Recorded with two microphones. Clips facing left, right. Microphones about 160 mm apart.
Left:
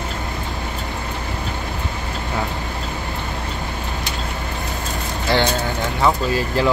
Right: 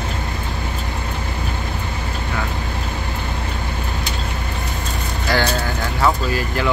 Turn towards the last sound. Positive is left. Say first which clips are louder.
# left 2 dB
turn(degrees=25)  # may be behind; listen again after turning